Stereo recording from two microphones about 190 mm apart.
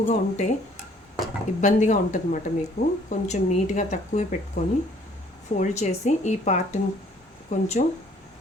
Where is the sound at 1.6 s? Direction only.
40° left (ahead or behind).